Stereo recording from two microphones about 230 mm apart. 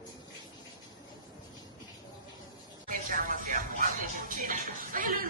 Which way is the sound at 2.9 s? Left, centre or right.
Right.